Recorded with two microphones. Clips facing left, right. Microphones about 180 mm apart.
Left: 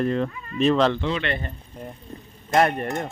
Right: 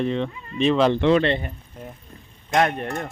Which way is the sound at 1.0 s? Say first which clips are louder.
Right 9 dB; 65° right (ahead or behind).